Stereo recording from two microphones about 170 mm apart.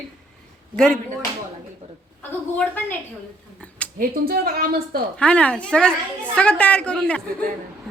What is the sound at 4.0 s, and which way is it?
A woman's voice, 60° right (ahead or behind).